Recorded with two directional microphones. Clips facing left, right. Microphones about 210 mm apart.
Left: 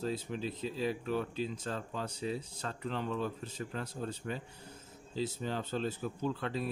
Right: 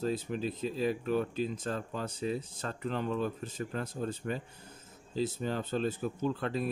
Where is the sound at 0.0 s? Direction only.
50° right (ahead or behind).